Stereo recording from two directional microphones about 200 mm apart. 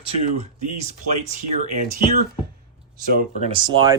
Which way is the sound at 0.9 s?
35° right (ahead or behind).